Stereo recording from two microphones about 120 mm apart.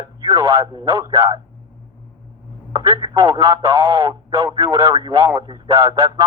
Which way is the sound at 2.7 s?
35° right (ahead or behind).